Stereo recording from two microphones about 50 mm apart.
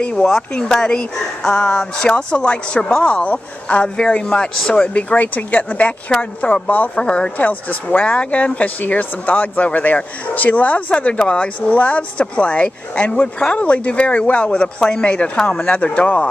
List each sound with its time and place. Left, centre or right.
0.0 s speech: centre
3.9 s speech: centre
7.4 s speech: left